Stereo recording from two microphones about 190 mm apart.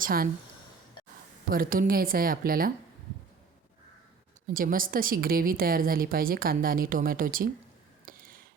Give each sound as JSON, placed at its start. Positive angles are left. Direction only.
{"t": 0.0, "sound": "speech", "side_deg": -50}
{"t": 1.5, "sound": "a woman's voice", "side_deg": -50}
{"t": 4.4, "sound": "a woman's voice", "side_deg": -45}
{"t": 8.0, "sound": "a sound", "side_deg": -50}